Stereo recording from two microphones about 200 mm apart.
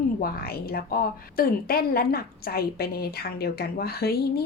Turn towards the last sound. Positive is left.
turn(degrees=50)  # may be behind; listen again after turning